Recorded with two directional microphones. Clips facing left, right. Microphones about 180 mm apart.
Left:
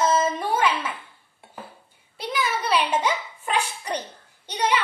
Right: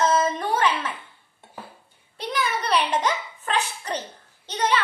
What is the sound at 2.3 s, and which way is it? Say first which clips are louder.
A child's voice: even; 5° left (ahead or behind).